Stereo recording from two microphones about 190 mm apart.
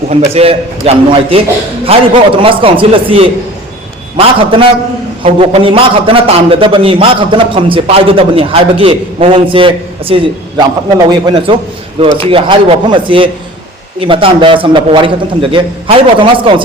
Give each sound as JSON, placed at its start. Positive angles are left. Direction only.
{"t": 0.1, "sound": "a man's voice", "side_deg": -35}
{"t": 5.2, "sound": "a man's voice", "side_deg": -30}